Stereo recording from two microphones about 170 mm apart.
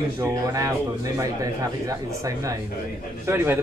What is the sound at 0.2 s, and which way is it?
A man's voice, 20° right (ahead or behind).